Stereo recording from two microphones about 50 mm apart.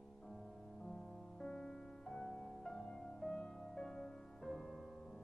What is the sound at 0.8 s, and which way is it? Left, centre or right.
Music, centre.